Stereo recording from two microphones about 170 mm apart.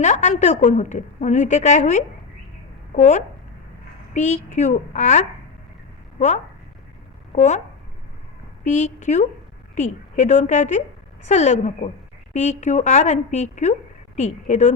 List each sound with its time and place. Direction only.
0.0 s a woman's voice: 45° left (ahead or behind)
8.6 s a woman's voice: 45° left (ahead or behind)